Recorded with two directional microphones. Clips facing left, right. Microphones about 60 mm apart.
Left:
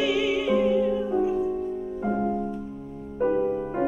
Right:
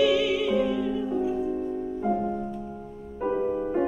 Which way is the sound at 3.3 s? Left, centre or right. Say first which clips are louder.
Left 1 dB; centre.